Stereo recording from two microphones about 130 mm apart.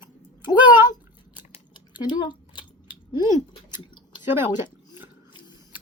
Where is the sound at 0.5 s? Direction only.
15° right (ahead or behind).